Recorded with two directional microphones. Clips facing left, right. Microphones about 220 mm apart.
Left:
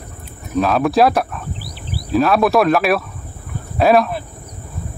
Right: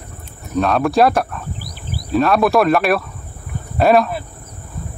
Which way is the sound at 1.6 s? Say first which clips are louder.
Even; 45° right (ahead or behind).